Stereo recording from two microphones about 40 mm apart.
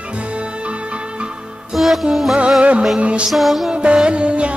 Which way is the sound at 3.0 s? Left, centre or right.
Right.